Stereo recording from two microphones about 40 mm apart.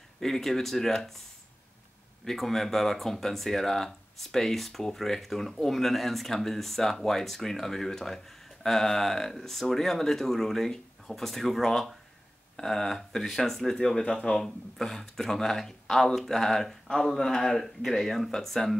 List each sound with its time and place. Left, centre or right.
0.2 s speech: centre
2.2 s speech: centre
13.8 s speech: centre
14.4 s speech: centre